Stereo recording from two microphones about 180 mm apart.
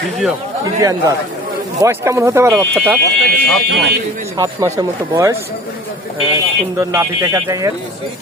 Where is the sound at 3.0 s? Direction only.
70° left (ahead or behind).